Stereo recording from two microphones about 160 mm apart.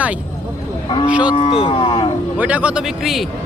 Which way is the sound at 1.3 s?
30° left (ahead or behind).